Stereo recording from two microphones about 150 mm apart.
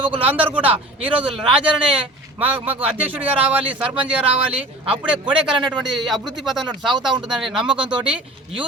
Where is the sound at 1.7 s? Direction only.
10° right (ahead or behind).